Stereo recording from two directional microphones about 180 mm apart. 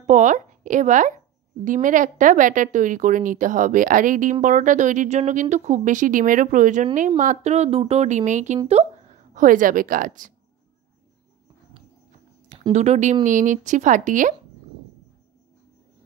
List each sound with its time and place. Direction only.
0.0 s a woman's voice: 45° right (ahead or behind)
12.5 s a woman's voice: 35° right (ahead or behind)